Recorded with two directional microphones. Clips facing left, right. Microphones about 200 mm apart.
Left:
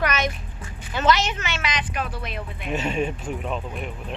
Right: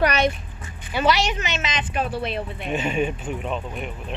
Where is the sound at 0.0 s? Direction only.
35° right (ahead or behind).